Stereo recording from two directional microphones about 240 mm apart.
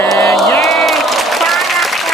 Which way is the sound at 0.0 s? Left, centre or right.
Centre.